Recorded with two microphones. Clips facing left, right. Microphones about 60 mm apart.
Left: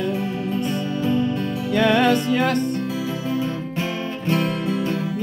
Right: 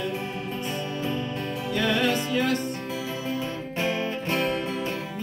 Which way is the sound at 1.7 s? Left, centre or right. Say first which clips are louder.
Left 7 dB; left.